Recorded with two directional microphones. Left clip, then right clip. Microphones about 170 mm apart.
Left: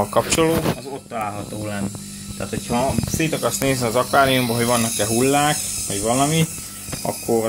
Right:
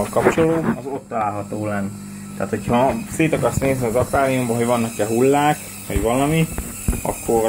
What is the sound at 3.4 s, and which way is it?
Speech, 10° left (ahead or behind).